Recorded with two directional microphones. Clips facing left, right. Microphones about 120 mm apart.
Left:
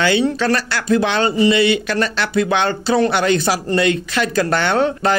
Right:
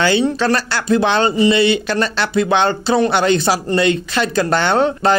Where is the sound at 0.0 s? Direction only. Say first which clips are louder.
Right 1 dB; 30° right (ahead or behind).